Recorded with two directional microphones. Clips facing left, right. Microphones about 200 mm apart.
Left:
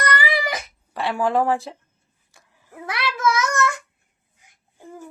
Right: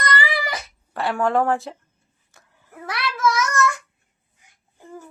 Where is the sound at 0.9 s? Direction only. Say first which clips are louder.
Even; centre (ahead or behind).